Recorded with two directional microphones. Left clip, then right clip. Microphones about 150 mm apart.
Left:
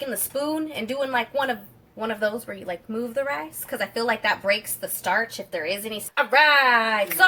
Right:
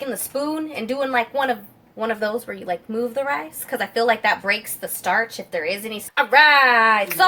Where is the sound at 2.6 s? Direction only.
35° right (ahead or behind).